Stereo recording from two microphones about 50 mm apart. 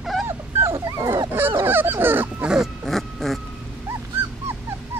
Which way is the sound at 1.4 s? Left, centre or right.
Right.